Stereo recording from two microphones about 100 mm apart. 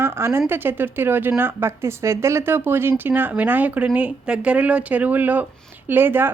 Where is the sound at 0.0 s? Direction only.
25° right (ahead or behind).